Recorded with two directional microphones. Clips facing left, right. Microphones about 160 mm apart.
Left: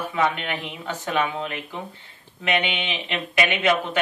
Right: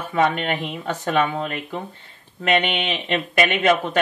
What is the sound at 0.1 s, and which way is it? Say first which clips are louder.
Speech: right 6 dB; 55° right (ahead or behind).